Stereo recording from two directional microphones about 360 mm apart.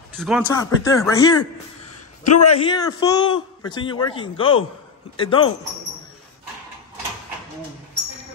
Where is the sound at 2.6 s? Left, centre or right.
Centre.